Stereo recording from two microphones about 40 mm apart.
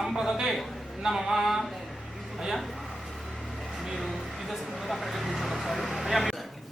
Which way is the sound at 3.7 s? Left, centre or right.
Centre.